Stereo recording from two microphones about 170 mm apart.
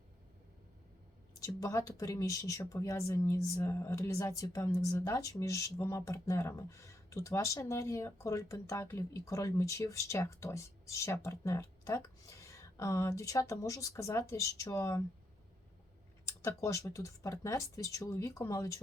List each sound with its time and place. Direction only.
1.5 s speech: 20° left (ahead or behind)
16.2 s speech: 15° left (ahead or behind)